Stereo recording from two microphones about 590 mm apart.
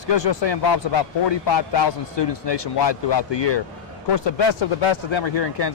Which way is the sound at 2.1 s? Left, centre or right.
Left.